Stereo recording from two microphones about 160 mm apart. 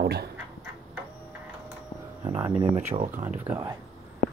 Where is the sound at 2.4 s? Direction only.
35° right (ahead or behind).